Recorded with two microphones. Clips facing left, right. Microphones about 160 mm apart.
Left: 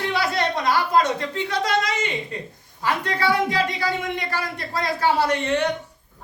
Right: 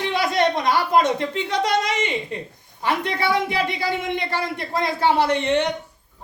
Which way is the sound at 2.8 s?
20° right (ahead or behind).